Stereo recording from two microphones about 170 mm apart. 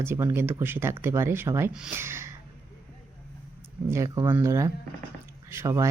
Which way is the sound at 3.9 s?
20° right (ahead or behind).